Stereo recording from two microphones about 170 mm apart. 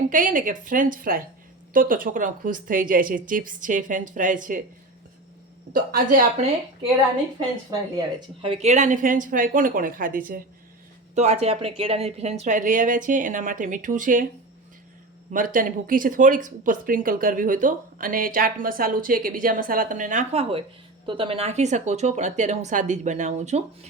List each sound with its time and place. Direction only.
0.1 s speech: 50° right (ahead or behind)
5.7 s speech: 55° right (ahead or behind)
7.3 s speech: 25° right (ahead or behind); by 10.4 s 55° right (ahead or behind)
11.1 s speech: 40° right (ahead or behind)
15.3 s speech: 50° right (ahead or behind)